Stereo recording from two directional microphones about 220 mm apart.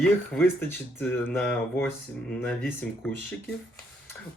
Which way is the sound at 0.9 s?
10° left (ahead or behind).